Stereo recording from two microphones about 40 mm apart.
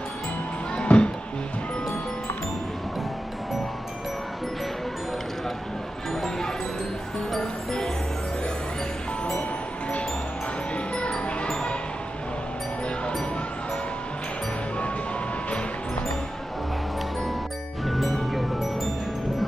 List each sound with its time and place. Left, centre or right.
0.7 s music: left
11.0 s music: left
17.8 s music: centre